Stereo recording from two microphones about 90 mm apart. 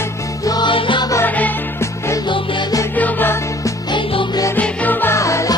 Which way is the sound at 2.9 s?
20° left (ahead or behind).